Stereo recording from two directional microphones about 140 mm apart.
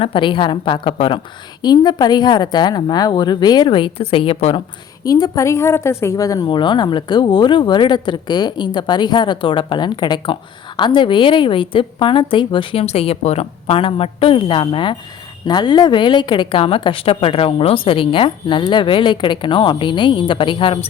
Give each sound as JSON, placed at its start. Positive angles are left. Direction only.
{"t": 0.0, "sound": "a woman's voice", "side_deg": 35}
{"t": 5.0, "sound": "a woman's voice", "side_deg": 25}